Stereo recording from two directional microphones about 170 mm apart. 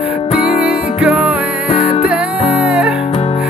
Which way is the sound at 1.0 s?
5° right (ahead or behind).